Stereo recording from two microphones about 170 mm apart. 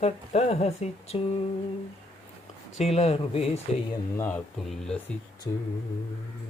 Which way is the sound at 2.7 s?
40° left (ahead or behind).